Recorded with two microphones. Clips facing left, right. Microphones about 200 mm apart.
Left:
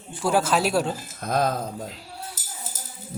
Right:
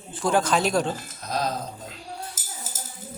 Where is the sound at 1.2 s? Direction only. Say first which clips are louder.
Left 5 dB; 55° left (ahead or behind).